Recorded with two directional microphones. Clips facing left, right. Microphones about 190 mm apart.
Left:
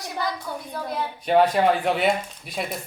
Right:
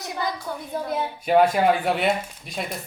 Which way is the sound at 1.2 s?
5° right (ahead or behind).